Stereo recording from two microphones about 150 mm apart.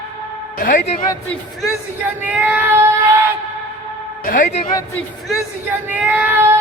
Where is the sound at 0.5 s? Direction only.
70° left (ahead or behind).